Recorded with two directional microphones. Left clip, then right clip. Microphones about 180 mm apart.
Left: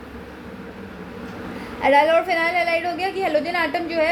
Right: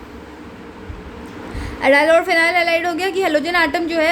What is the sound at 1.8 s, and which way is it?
A woman's voice, 35° right (ahead or behind).